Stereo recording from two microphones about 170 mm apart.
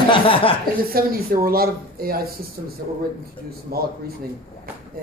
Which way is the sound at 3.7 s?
65° right (ahead or behind).